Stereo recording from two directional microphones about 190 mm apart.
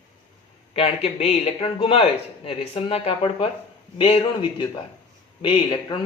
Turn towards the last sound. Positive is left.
turn(degrees=25)  # may be behind; listen again after turning